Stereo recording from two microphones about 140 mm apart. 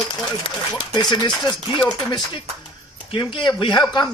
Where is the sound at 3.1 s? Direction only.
35° left (ahead or behind).